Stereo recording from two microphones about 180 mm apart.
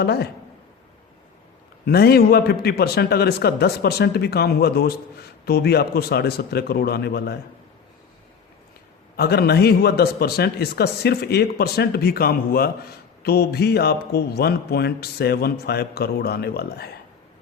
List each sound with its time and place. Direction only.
0.0 s speech: 65° left (ahead or behind)
1.8 s speech: 60° left (ahead or behind)
9.1 s speech: 60° left (ahead or behind)